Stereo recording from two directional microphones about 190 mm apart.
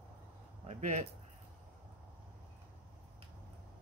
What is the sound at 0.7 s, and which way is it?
Speech, 40° right (ahead or behind).